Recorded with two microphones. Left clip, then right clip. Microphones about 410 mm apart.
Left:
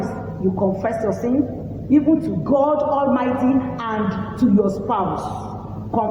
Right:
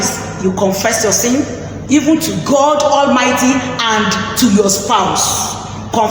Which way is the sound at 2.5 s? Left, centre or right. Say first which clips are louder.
Right 7 dB; left.